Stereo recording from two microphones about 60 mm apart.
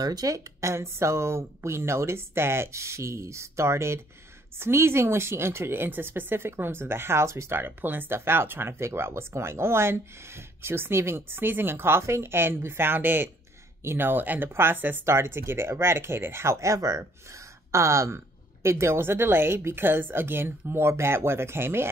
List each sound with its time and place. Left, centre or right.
0.0 s a woman's voice: right
14.5 s speech: right
15.0 s a woman's voice: right